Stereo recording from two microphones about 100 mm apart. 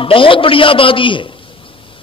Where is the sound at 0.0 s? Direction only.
60° left (ahead or behind).